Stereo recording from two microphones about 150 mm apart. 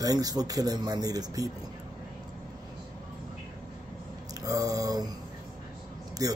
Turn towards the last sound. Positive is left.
turn(degrees=-25)  # may be behind; listen again after turning